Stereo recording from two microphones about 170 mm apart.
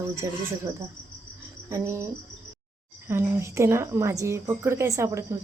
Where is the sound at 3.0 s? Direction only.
15° right (ahead or behind).